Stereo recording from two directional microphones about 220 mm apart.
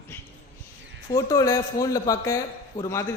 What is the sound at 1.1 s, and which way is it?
A man's voice, 15° left (ahead or behind).